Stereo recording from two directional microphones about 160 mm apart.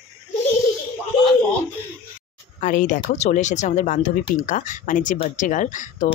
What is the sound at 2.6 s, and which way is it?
Speech, 55° left (ahead or behind).